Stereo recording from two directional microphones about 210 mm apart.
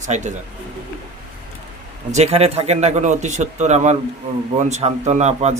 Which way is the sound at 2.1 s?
30° right (ahead or behind).